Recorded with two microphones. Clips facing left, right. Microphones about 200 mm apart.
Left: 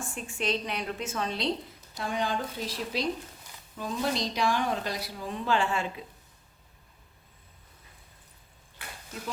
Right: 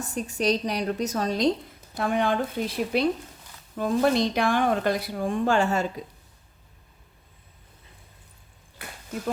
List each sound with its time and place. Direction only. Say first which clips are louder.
0.0 s a woman's voice: right 7 dB; 40° right (ahead or behind)
2.0 s a woman's voice: right 7 dB; 55° right (ahead or behind); by 6.1 s 40° right (ahead or behind)